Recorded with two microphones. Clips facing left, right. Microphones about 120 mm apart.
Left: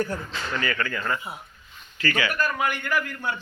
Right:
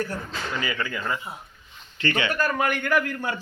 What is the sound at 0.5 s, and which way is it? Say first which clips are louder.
Speech: left 2 dB; 15° right (ahead or behind).